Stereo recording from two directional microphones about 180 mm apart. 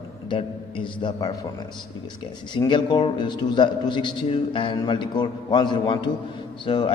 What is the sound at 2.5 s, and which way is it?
A man's voice, 25° left (ahead or behind).